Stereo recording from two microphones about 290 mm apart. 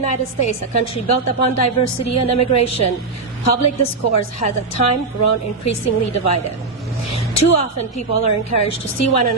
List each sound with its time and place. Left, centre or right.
0.0 s a woman's voice: left